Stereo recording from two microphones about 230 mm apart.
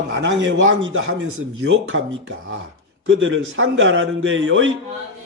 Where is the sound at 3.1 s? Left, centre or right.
Right.